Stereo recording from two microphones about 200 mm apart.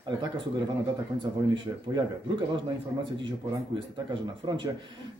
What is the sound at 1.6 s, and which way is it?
Speech, 25° right (ahead or behind).